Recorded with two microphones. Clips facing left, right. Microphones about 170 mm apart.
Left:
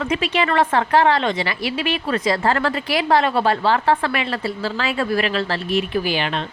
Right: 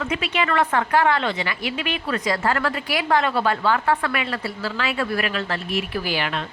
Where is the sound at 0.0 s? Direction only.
30° left (ahead or behind).